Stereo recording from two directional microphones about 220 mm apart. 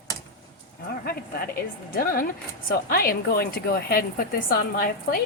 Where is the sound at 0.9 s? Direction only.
45° left (ahead or behind).